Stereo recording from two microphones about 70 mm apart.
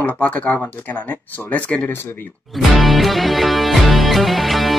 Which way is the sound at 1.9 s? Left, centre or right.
Left.